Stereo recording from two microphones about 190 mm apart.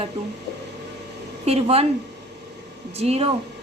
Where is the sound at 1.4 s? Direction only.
30° right (ahead or behind).